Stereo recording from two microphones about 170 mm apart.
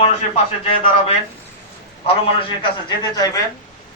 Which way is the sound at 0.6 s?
35° left (ahead or behind).